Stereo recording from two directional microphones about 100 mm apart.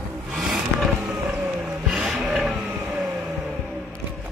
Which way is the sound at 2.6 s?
15° right (ahead or behind).